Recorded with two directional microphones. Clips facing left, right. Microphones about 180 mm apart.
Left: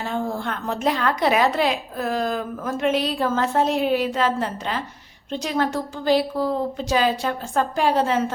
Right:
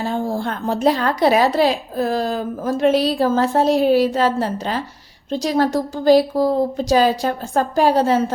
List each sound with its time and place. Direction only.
0.0 s a woman's voice: 35° right (ahead or behind)